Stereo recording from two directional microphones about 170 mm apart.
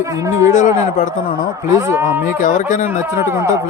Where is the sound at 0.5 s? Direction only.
45° left (ahead or behind).